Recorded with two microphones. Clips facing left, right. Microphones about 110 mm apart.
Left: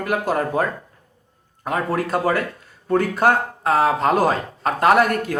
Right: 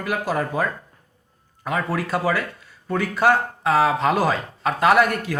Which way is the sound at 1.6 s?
45° left (ahead or behind).